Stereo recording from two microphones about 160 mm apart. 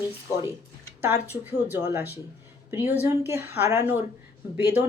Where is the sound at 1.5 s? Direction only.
15° right (ahead or behind).